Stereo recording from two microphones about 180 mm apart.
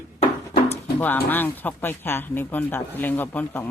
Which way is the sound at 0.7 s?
10° left (ahead or behind).